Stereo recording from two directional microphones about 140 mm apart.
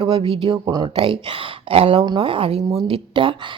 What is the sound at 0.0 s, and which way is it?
A woman's voice, 40° right (ahead or behind).